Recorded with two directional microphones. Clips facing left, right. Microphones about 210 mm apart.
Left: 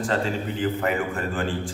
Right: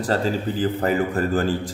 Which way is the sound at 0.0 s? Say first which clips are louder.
Right 3 dB; 35° right (ahead or behind).